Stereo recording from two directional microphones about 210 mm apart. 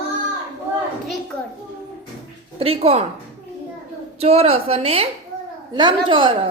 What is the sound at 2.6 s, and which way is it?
Speech, 30° right (ahead or behind).